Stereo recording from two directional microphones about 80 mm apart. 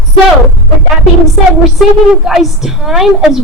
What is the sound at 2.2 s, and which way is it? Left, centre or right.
A woman's voice, centre.